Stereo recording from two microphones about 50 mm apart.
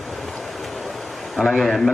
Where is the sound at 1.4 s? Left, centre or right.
Centre.